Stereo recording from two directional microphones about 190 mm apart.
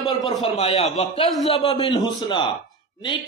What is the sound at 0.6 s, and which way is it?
A man's voice, 30° left (ahead or behind).